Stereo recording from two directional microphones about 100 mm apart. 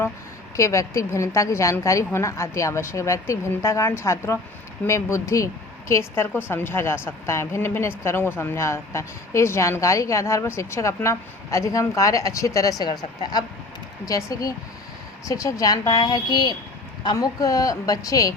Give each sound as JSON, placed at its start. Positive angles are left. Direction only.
{"t": 0.5, "sound": "a woman's voice", "side_deg": 30}